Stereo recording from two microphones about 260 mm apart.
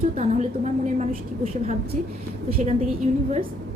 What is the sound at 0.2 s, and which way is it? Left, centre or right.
Speech, right.